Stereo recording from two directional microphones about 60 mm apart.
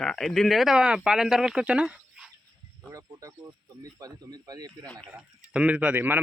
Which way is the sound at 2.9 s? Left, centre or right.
Right.